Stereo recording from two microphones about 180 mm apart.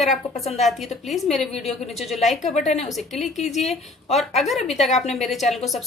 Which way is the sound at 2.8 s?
Centre (ahead or behind).